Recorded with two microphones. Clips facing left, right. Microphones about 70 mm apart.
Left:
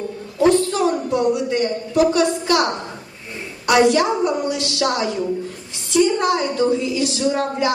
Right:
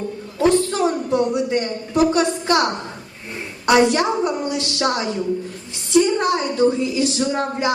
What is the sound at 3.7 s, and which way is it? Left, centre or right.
A woman's voice, right.